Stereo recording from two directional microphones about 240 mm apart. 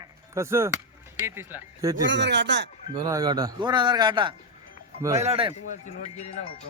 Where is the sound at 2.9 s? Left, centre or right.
Centre.